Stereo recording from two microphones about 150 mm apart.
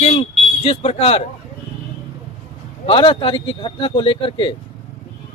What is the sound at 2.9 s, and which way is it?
Speech, 35° left (ahead or behind).